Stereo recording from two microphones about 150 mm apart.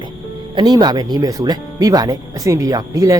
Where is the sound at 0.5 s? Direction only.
30° right (ahead or behind).